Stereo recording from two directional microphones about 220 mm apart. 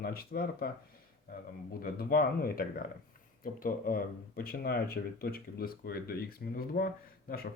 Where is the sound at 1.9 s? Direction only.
45° left (ahead or behind).